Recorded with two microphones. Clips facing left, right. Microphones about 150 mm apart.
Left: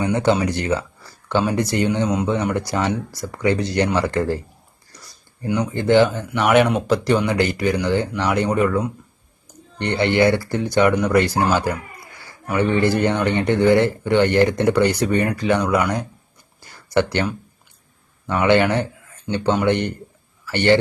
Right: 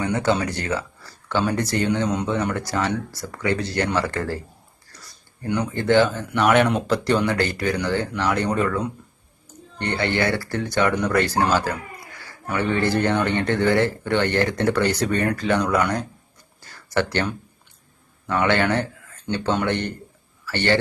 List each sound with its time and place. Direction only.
0.0 s speech: 20° left (ahead or behind)
5.5 s speech: 15° left (ahead or behind)
16.6 s a sound: 15° left (ahead or behind)
18.3 s speech: 20° left (ahead or behind)